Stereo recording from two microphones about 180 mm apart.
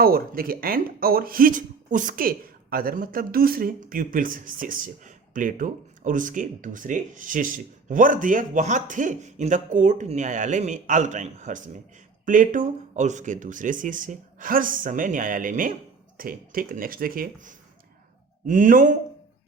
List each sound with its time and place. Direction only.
0.0 s speech: 55° right (ahead or behind)